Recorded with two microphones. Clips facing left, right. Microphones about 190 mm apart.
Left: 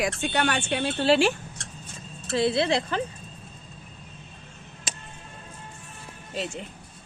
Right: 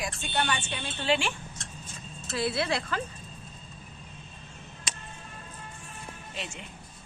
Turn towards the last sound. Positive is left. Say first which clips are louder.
# left 8 dB
turn(degrees=40)  # may be behind; listen again after turning